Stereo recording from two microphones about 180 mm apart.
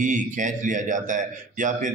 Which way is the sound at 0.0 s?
45° right (ahead or behind).